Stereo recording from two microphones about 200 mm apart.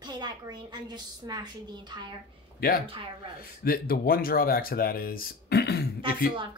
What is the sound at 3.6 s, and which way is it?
Speech, 50° left (ahead or behind).